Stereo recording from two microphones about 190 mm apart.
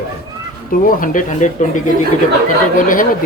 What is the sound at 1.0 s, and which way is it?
Speech, 45° left (ahead or behind).